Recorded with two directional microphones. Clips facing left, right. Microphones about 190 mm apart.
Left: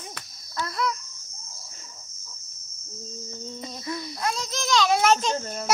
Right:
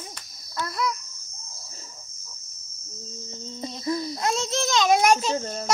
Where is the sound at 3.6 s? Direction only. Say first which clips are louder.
Right 7 dB; 30° right (ahead or behind); by 5.4 s 10° right (ahead or behind).